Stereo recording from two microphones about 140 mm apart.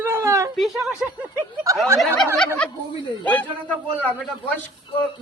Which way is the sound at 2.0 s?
5° left (ahead or behind).